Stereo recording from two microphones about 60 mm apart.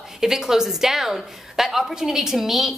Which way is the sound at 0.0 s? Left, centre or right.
Centre.